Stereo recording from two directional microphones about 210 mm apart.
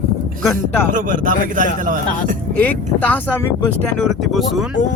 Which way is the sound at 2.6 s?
5° left (ahead or behind).